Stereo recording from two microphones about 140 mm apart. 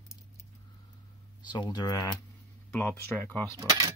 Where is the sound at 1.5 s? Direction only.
30° left (ahead or behind).